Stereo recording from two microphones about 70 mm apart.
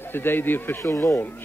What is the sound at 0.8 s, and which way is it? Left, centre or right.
Speech, left.